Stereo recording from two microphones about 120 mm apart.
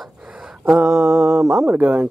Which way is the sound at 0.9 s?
25° right (ahead or behind).